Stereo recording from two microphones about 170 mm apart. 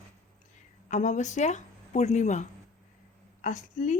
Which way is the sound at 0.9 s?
45° left (ahead or behind).